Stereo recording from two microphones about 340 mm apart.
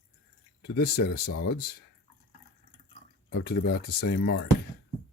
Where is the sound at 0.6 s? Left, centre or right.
Left.